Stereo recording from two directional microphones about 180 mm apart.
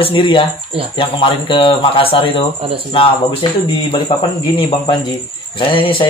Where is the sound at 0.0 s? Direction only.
30° left (ahead or behind).